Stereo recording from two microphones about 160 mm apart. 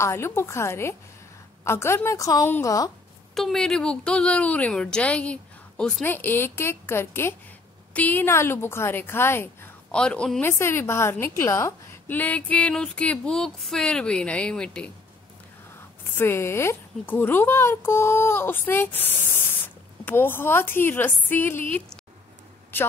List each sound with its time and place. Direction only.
0.0 s speech: 15° left (ahead or behind)
3.3 s speech: centre (ahead or behind)
16.2 s speech: 15° left (ahead or behind)